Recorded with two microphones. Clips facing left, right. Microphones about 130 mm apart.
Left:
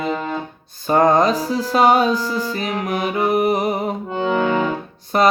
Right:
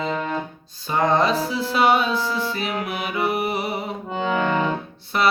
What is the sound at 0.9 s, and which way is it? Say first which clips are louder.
Music: left 5 dB; 45° left (ahead or behind).